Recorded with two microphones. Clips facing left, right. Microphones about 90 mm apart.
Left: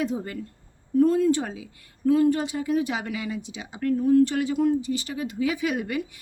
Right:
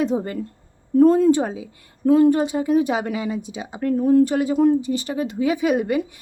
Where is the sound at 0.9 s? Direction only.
40° right (ahead or behind).